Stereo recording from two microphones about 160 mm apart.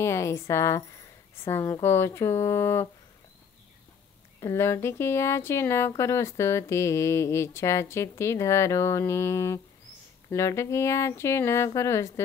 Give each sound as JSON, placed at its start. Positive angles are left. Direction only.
{"t": 0.0, "sound": "speech", "side_deg": 20}
{"t": 4.4, "sound": "speech", "side_deg": 15}